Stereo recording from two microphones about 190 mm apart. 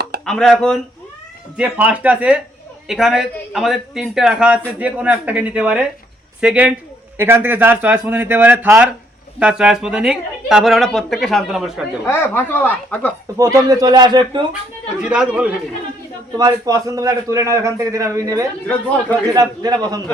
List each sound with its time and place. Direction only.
0.3 s a man's voice: 5° left (ahead or behind)
12.0 s speech: 10° left (ahead or behind)
13.3 s a man's voice: 15° right (ahead or behind)
15.0 s a man's voice: 5° right (ahead or behind)
16.4 s a man's voice: 20° right (ahead or behind)